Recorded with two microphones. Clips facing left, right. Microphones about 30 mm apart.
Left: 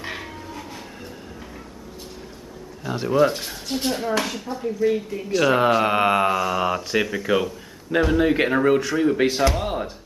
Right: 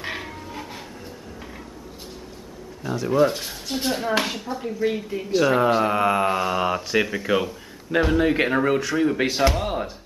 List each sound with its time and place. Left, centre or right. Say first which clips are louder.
0.0 s train: right 1 dB; centre
3.1 s speech: left 1 dB; centre
4.1 s speech: right 2 dB; right
4.5 s speech: left 3 dB; centre
5.9 s mantra: left 2 dB; left
6.3 s speech: left 1 dB; centre
9.5 s music: even; centre